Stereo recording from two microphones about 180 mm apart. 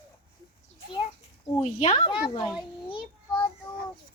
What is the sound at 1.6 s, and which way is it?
Speech, 40° left (ahead or behind).